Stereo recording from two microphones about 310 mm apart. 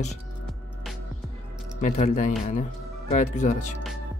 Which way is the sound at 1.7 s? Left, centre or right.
Left.